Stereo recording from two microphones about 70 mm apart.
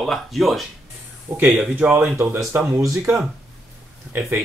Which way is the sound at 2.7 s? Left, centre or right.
Right.